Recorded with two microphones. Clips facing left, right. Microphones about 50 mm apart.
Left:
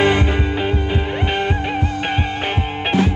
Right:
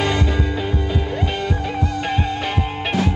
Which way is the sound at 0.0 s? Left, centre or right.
Left.